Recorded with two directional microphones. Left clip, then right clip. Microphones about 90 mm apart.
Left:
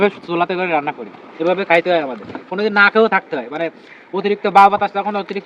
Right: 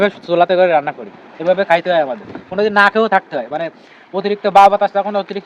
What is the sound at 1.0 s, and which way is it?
Speech, 75° right (ahead or behind).